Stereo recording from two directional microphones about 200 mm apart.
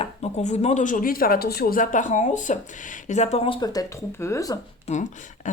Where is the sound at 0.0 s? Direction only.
35° left (ahead or behind); by 4.5 s 15° left (ahead or behind).